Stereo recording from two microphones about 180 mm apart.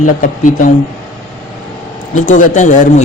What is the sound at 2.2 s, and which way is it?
Speech, 45° left (ahead or behind).